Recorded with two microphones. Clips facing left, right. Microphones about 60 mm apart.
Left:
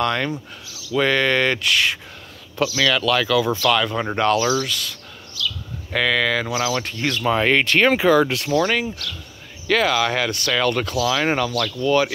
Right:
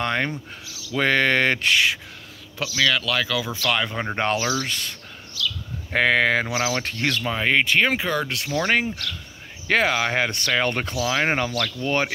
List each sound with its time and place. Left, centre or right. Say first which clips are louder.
0.0 s speech: left 3 dB; right
0.9 s speech: left 1 dB; right
2.6 s speech: left 3 dB; centre
3.5 s speech: left 5 dB; centre; by 7.2 s right
7.4 s speech: right 1 dB; centre
8.0 s speech: left 9 dB; centre
8.6 s speech: even; right